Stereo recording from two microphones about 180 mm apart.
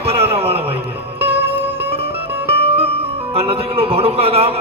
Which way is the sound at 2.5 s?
35° right (ahead or behind).